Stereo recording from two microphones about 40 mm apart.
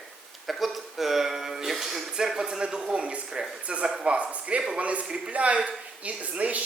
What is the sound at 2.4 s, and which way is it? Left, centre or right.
A woman's voice, right.